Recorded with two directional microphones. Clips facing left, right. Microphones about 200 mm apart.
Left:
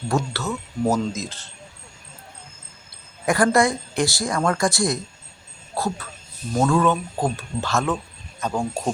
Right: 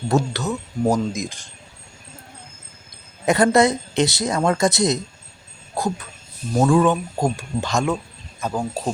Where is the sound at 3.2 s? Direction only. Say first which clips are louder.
Right 3 dB; 20° right (ahead or behind).